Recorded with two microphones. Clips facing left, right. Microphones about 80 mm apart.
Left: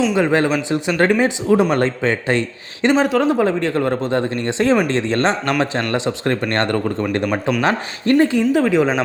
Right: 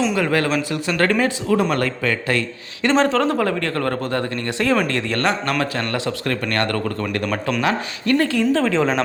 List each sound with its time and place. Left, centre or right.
0.1 s speech: left
2.8 s speech: centre
7.6 s speech: left
8.2 s speech: left